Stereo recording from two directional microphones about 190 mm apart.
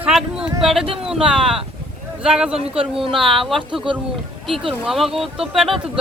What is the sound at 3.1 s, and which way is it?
Speech, centre (ahead or behind).